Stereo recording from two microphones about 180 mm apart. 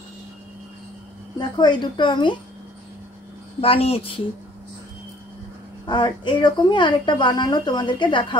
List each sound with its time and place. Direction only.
1.4 s a woman's voice: 25° left (ahead or behind)
3.6 s speech: 30° left (ahead or behind)
5.9 s a woman's voice: 25° left (ahead or behind)